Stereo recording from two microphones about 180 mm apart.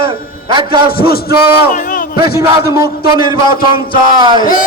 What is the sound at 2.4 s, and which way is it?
A man's voice, 20° right (ahead or behind).